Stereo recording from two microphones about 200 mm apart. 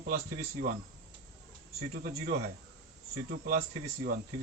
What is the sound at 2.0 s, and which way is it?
Speech, 50° right (ahead or behind).